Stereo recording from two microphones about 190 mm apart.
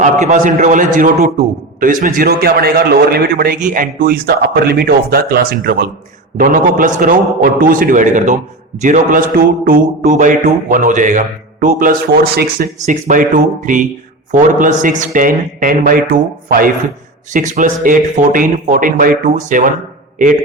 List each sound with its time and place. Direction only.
0.0 s a man's voice: 40° right (ahead or behind)